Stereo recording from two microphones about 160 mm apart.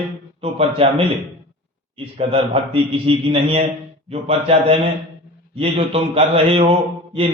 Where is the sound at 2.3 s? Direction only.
35° right (ahead or behind).